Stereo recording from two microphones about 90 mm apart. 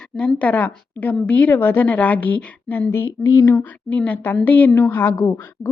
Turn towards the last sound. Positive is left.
turn(degrees=30)  # may be behind; listen again after turning